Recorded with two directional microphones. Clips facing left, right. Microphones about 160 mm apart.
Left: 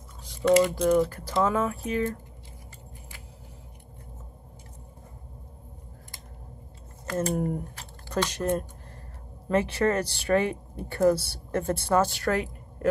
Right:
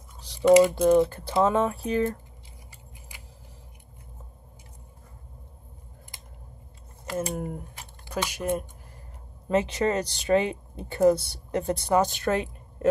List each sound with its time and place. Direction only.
0.5 s speech: 10° right (ahead or behind)
0.8 s speech: 25° right (ahead or behind)
7.1 s speech: 15° right (ahead or behind)
7.7 s a sound: 10° right (ahead or behind)
9.5 s speech: 20° right (ahead or behind)